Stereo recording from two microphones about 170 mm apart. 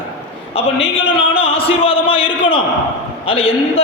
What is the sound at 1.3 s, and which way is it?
A man's voice, 35° left (ahead or behind).